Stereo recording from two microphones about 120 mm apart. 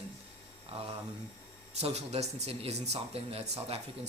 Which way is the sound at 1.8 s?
60° right (ahead or behind).